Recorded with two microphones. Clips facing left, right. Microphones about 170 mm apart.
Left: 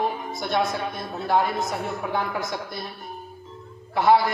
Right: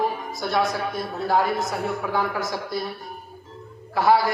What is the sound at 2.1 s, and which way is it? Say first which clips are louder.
Speech: right 2 dB; 20° left (ahead or behind).